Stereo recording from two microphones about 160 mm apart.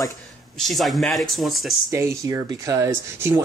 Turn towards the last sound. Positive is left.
turn(degrees=-15)  # may be behind; listen again after turning